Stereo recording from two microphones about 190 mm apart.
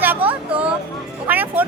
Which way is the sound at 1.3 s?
10° right (ahead or behind).